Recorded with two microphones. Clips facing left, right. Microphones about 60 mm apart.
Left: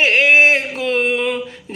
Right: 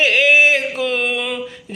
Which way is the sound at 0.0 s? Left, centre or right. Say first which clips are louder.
Left 1 dB; left.